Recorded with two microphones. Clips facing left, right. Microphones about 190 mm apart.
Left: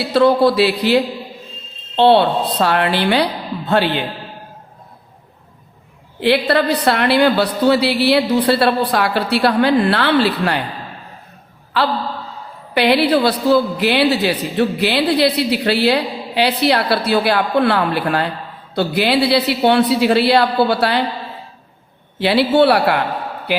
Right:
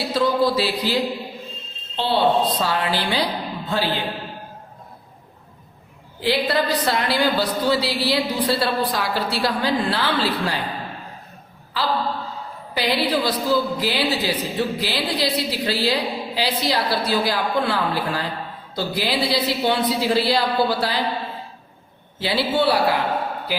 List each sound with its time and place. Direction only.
0.1 s a man's voice: 65° left (ahead or behind)
6.1 s a woman's voice: 65° left (ahead or behind)
12.7 s a woman's voice: 65° left (ahead or behind)
22.2 s a woman's voice: 70° left (ahead or behind)